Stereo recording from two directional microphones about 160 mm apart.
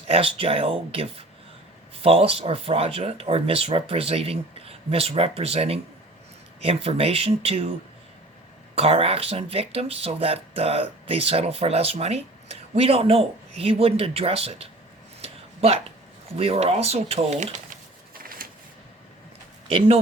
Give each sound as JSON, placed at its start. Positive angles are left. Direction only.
{"t": 0.1, "sound": "speech", "side_deg": -35}
{"t": 8.7, "sound": "speech", "side_deg": -40}
{"t": 15.2, "sound": "a sound", "side_deg": -40}
{"t": 16.4, "sound": "speech", "side_deg": -40}
{"t": 18.1, "sound": "a sound", "side_deg": -65}
{"t": 19.6, "sound": "speech", "side_deg": -35}